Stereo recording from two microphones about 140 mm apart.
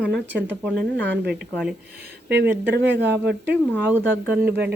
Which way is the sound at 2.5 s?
15° right (ahead or behind).